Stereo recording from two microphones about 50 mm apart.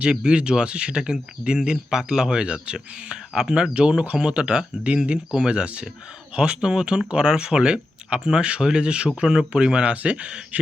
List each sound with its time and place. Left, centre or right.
0.0 s speech: centre